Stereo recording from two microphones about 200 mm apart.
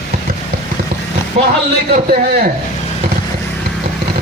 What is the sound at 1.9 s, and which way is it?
Speech, 45° right (ahead or behind).